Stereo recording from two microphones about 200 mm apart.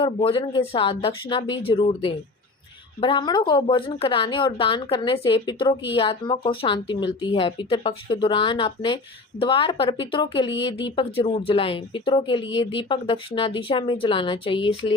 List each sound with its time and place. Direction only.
0.0 s speech: 25° left (ahead or behind)